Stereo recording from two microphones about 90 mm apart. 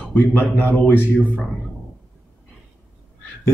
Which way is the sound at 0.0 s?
20° left (ahead or behind).